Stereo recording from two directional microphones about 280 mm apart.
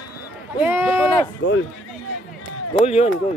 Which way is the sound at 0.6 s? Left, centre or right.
Centre.